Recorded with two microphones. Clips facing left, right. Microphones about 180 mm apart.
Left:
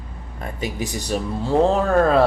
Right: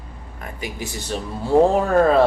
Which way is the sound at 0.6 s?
20° left (ahead or behind).